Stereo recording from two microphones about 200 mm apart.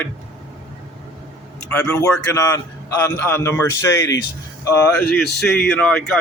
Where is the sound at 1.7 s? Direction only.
10° left (ahead or behind).